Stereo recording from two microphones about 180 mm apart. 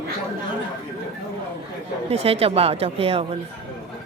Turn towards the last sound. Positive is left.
turn(degrees=-35)  # may be behind; listen again after turning